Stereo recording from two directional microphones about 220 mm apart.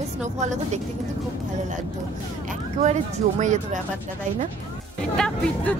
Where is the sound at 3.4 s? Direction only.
35° right (ahead or behind).